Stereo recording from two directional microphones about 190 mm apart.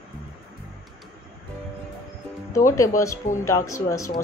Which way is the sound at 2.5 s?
15° left (ahead or behind).